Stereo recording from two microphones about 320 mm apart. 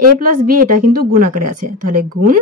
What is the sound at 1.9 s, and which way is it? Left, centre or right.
Speech, right.